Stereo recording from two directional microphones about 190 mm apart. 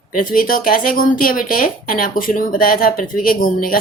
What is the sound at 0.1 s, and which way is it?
A woman's voice, 45° left (ahead or behind).